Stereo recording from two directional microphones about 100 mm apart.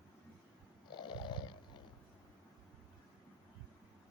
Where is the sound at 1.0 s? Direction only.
50° left (ahead or behind).